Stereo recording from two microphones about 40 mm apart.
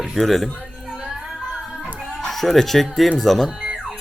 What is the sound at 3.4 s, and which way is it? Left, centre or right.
Music, centre.